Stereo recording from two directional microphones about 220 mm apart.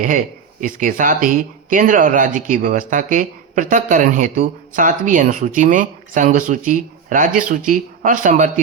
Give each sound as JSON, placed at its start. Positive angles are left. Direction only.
{"t": 0.6, "sound": "speech", "side_deg": -35}